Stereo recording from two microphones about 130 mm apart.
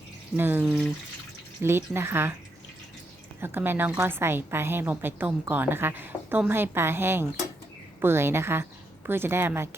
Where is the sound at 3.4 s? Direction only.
15° right (ahead or behind).